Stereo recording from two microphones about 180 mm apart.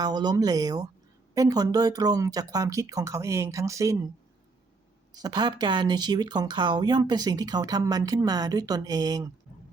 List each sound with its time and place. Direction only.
0.0 s speech: 20° right (ahead or behind)
5.1 s speech: 25° right (ahead or behind)